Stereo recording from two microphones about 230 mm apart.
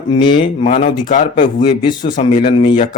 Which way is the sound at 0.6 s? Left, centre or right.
Left.